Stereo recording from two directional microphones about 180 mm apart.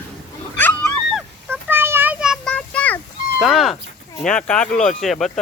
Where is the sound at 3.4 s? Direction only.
Centre (ahead or behind).